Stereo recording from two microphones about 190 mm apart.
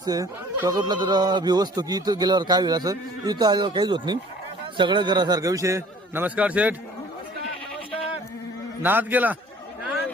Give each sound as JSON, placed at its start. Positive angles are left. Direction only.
{"t": 0.0, "sound": "a man's voice", "side_deg": -20}
{"t": 8.8, "sound": "a man's voice", "side_deg": -10}